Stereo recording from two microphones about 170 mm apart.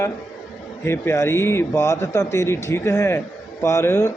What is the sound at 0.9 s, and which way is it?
A man's voice, 15° left (ahead or behind).